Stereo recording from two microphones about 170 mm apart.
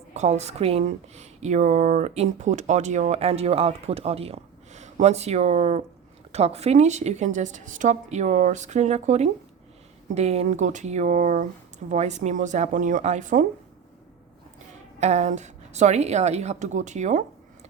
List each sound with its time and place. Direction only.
0.1 s a woman's voice: 40° right (ahead or behind)
15.0 s a woman's voice: 40° right (ahead or behind)